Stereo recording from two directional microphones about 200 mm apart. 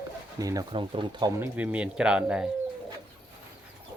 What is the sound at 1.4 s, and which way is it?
Speech, 10° right (ahead or behind).